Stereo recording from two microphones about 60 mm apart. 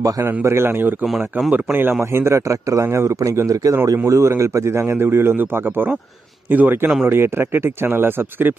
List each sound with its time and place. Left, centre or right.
0.2 s a man's voice: right
4.0 s a man's voice: right